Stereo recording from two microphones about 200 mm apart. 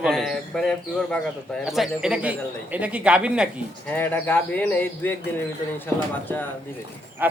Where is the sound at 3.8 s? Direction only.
10° left (ahead or behind).